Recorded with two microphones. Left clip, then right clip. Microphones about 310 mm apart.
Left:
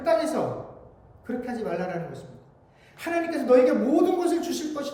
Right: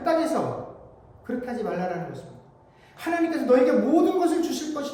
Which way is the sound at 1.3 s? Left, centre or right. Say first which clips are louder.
Right 1 dB; centre.